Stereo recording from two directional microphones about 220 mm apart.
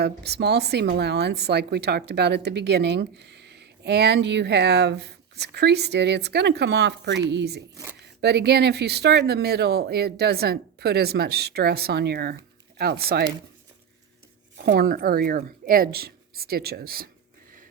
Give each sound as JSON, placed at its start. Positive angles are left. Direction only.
{"t": 0.0, "sound": "speech", "side_deg": -50}
{"t": 14.5, "sound": "speech", "side_deg": -45}